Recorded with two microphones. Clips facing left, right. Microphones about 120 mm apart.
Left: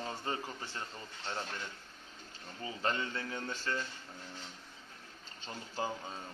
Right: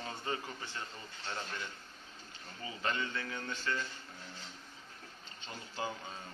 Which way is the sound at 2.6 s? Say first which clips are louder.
Left 2 dB; 35° left (ahead or behind).